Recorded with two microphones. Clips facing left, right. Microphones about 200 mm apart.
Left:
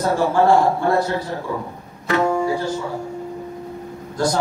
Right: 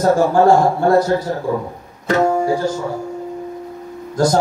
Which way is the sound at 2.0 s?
45° right (ahead or behind).